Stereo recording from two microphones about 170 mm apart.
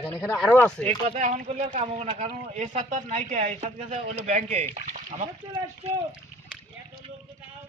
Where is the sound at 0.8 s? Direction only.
40° right (ahead or behind).